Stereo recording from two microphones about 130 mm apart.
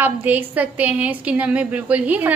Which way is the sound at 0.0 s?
15° right (ahead or behind).